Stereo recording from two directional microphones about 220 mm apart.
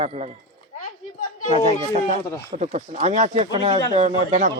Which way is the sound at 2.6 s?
30° right (ahead or behind).